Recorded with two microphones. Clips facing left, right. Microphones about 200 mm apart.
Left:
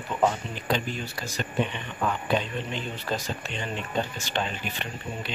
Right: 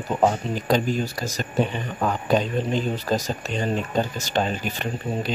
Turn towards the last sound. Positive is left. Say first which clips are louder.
# right 8 dB
turn(degrees=-40)  # may be behind; listen again after turning